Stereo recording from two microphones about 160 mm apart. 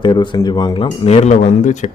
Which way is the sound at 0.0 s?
30° left (ahead or behind).